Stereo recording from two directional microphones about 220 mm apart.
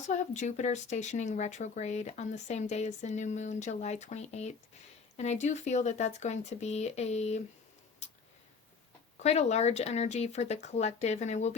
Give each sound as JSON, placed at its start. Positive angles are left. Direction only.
{"t": 0.0, "sound": "speech", "side_deg": 35}
{"t": 8.0, "sound": "a sound", "side_deg": 30}
{"t": 9.1, "sound": "speech", "side_deg": 30}